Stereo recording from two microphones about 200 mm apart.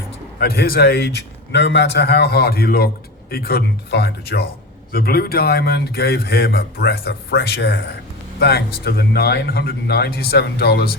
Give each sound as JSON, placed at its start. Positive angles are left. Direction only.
{"t": 0.3, "sound": "a man's voice", "side_deg": 55}